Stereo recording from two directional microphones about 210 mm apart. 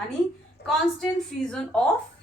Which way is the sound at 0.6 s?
55° left (ahead or behind).